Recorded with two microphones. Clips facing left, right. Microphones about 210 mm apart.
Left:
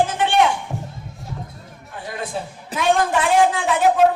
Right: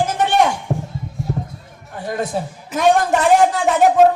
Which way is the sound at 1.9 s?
45° right (ahead or behind).